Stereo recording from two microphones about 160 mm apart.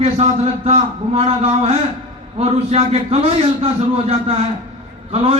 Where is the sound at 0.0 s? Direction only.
40° right (ahead or behind).